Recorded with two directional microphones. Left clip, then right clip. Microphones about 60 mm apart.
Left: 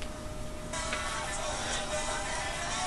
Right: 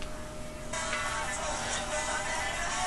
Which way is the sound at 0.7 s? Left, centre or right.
Right.